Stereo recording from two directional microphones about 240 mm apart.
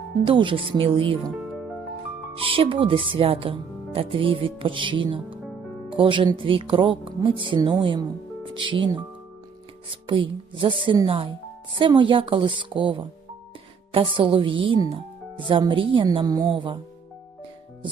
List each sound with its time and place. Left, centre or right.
0.3 s speech: right
2.3 s speech: right
9.9 s speech: right